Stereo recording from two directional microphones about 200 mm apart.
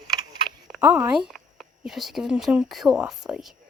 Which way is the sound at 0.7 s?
5° right (ahead or behind).